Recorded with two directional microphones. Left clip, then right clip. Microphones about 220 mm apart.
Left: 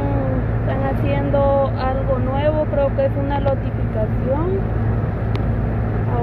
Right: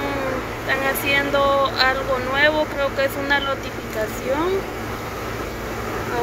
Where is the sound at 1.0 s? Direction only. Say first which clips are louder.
Left 1 dB; 5° right (ahead or behind).